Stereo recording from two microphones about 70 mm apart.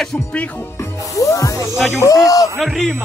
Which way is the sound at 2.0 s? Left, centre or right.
Left.